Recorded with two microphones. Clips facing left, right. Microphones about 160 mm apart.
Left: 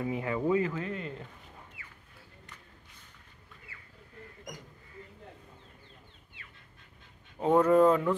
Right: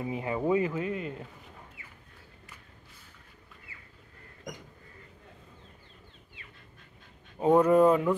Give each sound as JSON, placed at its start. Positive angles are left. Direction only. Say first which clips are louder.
{"t": 0.0, "sound": "speech", "louder": "even", "side_deg": -25}
{"t": 7.3, "sound": "speech", "louder": "right 1 dB", "side_deg": -10}